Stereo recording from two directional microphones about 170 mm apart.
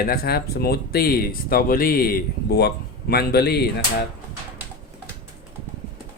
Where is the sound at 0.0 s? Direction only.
60° left (ahead or behind).